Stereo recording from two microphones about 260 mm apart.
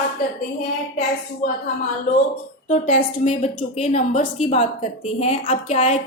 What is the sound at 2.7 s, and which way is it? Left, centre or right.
A woman's voice, left.